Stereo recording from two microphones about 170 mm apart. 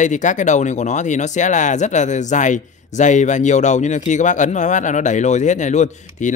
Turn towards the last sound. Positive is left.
turn(degrees=45)  # may be behind; listen again after turning